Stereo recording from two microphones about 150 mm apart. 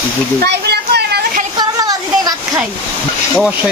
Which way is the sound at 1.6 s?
25° right (ahead or behind).